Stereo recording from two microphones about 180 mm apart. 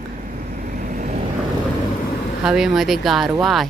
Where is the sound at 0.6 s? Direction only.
50° right (ahead or behind).